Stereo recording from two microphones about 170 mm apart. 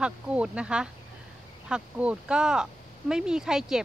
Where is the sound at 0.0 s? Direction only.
5° right (ahead or behind).